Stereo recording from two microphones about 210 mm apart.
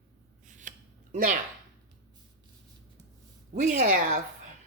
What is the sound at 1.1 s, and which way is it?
Speech, 35° right (ahead or behind).